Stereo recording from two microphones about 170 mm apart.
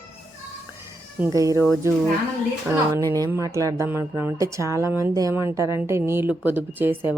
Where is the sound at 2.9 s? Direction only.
20° right (ahead or behind).